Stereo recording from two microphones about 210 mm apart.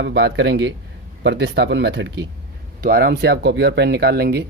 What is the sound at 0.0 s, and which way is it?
Speech, 55° right (ahead or behind).